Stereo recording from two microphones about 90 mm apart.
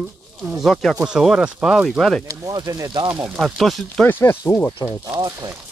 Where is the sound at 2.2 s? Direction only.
40° right (ahead or behind).